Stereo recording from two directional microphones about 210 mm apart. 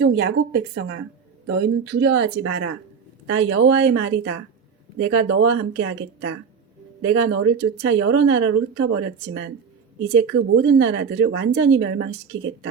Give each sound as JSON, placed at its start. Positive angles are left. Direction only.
{"t": 0.0, "sound": "a woman's voice", "side_deg": -55}